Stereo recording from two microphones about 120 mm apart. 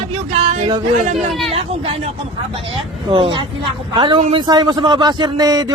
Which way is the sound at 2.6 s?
45° right (ahead or behind).